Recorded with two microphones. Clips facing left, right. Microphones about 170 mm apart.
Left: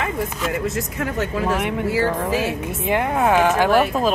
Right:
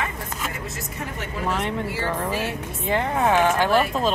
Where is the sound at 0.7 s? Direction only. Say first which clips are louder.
Left 8 dB; 90° left.